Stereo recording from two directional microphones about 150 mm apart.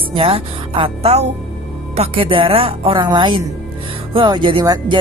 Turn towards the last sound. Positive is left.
turn(degrees=-30)  # may be behind; listen again after turning